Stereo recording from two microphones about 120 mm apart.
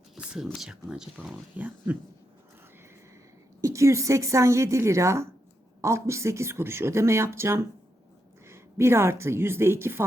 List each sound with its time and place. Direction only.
0.2 s speech: 5° right (ahead or behind)
3.6 s speech: 25° right (ahead or behind)